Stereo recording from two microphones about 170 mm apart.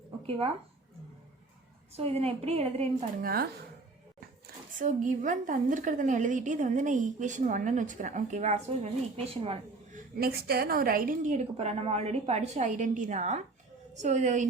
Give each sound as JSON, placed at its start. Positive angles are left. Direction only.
{"t": 0.3, "sound": "a woman's voice", "side_deg": -35}
{"t": 1.9, "sound": "a woman's voice", "side_deg": -35}
{"t": 3.2, "sound": "speech", "side_deg": -60}
{"t": 4.8, "sound": "a woman's voice", "side_deg": -50}
{"t": 10.2, "sound": "a woman's voice", "side_deg": -65}